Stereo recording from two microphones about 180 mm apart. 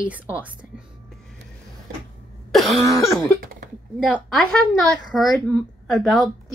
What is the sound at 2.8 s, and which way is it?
Cough, 15° left (ahead or behind).